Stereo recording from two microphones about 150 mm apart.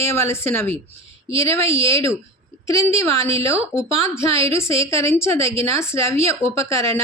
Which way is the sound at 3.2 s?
40° right (ahead or behind).